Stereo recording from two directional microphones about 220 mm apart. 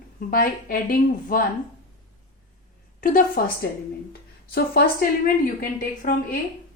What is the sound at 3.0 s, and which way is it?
Speech, 40° left (ahead or behind).